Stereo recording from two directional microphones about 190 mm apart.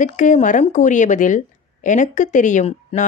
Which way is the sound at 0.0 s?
40° left (ahead or behind).